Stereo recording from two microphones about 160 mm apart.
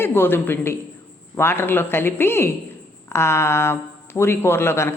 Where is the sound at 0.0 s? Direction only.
15° left (ahead or behind).